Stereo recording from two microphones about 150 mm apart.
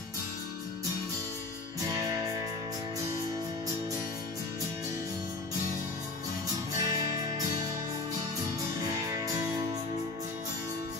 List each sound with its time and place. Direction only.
6.8 s music: 25° right (ahead or behind)
9.1 s music: 20° right (ahead or behind)